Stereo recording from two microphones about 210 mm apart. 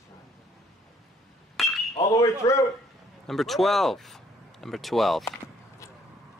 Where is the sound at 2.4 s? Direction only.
15° left (ahead or behind).